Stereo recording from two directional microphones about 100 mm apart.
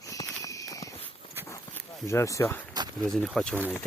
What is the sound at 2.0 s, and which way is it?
Speech, 30° left (ahead or behind).